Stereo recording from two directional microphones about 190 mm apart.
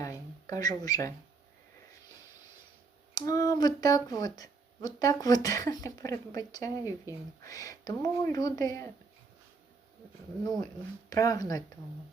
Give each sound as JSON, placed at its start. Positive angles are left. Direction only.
{"t": 0.0, "sound": "a sound", "side_deg": 15}
{"t": 3.2, "sound": "speech", "side_deg": 20}
{"t": 11.1, "sound": "speech", "side_deg": 20}